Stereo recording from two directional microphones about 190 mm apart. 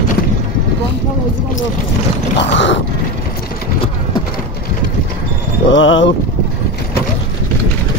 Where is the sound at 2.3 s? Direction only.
70° left (ahead or behind).